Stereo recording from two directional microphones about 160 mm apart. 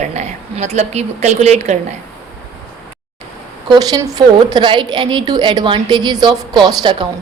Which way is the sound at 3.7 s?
25° right (ahead or behind).